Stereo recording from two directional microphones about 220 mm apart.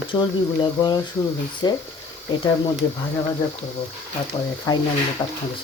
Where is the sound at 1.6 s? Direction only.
20° left (ahead or behind).